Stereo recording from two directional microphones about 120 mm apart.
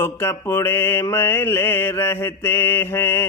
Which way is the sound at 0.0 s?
20° left (ahead or behind).